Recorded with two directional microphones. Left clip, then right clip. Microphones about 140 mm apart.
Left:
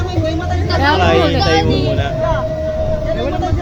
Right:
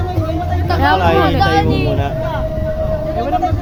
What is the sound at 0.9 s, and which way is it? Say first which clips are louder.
Speech: left 1 dB; 40° right (ahead or behind).